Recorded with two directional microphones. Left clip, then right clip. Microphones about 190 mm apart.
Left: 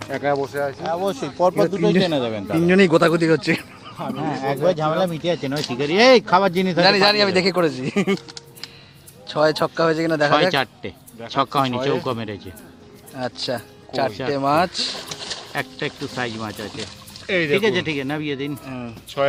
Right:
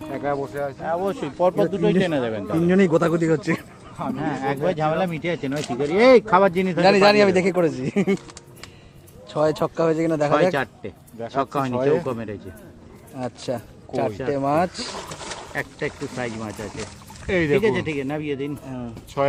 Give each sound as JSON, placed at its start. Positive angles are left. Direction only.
{"t": 0.1, "sound": "speech", "side_deg": 45}
{"t": 2.6, "sound": "speech", "side_deg": 5}
{"t": 4.2, "sound": "speech", "side_deg": 50}
{"t": 6.8, "sound": "a man's voice", "side_deg": 0}
{"t": 9.2, "sound": "a man's voice", "side_deg": 0}
{"t": 10.5, "sound": "speech", "side_deg": 40}
{"t": 13.1, "sound": "a man's voice", "side_deg": 0}
{"t": 15.5, "sound": "speech", "side_deg": 35}
{"t": 17.2, "sound": "speech", "side_deg": -30}
{"t": 17.6, "sound": "speech", "side_deg": 35}
{"t": 19.2, "sound": "speech", "side_deg": -25}